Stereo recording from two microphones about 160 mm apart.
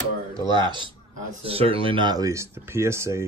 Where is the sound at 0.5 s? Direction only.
30° right (ahead or behind).